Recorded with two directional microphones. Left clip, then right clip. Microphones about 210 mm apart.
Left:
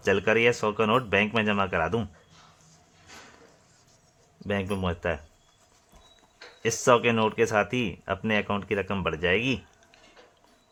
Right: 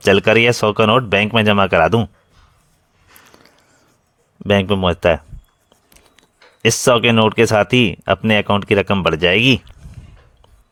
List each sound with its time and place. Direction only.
0.0 s speech: 40° right (ahead or behind)
4.4 s speech: 45° right (ahead or behind)
6.6 s speech: 40° right (ahead or behind)